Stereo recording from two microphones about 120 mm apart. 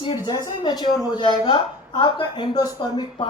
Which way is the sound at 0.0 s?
40° left (ahead or behind).